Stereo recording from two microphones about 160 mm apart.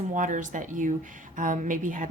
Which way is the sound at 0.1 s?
55° right (ahead or behind).